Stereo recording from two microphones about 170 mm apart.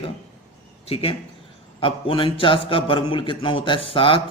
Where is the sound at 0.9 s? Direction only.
35° left (ahead or behind).